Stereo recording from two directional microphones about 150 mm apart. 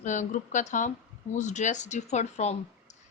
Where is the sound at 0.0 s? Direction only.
55° left (ahead or behind).